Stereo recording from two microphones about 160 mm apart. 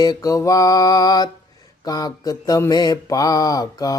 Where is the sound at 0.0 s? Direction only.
25° left (ahead or behind).